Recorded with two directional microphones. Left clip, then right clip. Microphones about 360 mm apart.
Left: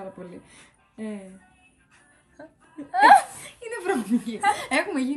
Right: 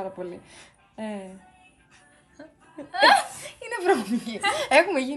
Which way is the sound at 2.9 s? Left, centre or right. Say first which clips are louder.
Left 3 dB; centre.